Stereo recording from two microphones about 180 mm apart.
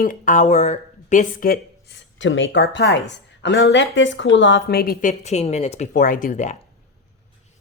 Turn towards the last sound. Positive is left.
turn(degrees=40)  # may be behind; listen again after turning